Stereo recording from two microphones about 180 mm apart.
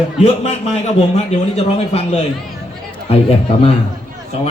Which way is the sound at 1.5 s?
35° left (ahead or behind).